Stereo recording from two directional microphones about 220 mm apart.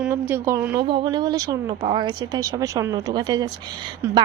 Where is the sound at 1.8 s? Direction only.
25° right (ahead or behind).